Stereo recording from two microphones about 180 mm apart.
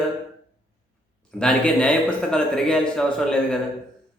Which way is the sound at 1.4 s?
5° left (ahead or behind).